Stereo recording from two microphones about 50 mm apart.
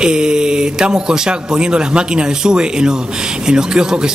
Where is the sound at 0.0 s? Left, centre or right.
Centre.